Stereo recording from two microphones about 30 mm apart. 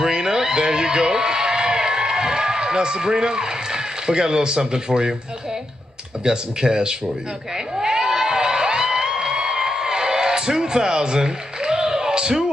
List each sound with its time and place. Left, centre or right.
0.0 s a sound: right
6.2 s speech: right
7.8 s crowd: right